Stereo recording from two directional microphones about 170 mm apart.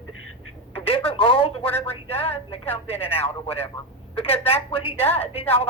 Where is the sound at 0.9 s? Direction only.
35° left (ahead or behind).